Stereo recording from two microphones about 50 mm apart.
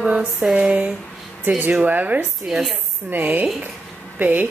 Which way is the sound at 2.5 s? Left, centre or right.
Centre.